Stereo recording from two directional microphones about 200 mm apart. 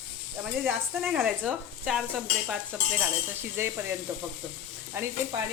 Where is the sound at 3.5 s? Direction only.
10° right (ahead or behind).